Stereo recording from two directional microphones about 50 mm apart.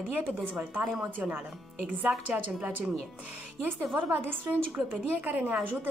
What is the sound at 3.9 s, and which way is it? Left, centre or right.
A woman's voice, right.